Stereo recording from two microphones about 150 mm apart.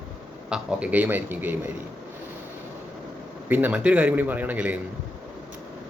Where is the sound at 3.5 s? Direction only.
10° right (ahead or behind).